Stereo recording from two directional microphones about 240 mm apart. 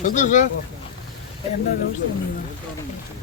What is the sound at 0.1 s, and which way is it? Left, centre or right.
Speech, left.